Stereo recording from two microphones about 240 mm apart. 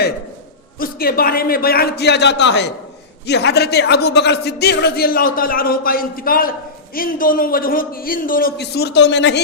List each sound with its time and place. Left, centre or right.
0.8 s a man's voice: left